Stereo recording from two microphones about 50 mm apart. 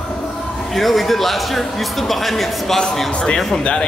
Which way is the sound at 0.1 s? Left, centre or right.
Centre.